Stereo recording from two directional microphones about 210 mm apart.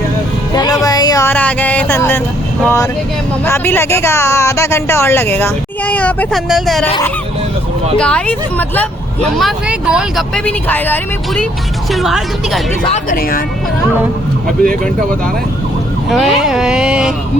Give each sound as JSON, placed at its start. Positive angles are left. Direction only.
{"t": 0.5, "sound": "a sound", "side_deg": 20}
{"t": 3.4, "sound": "speech", "side_deg": 10}
{"t": 7.9, "sound": "speech", "side_deg": 5}
{"t": 9.4, "sound": "speech", "side_deg": 0}
{"t": 13.1, "sound": "speech", "side_deg": 40}
{"t": 16.0, "sound": "speech", "side_deg": 0}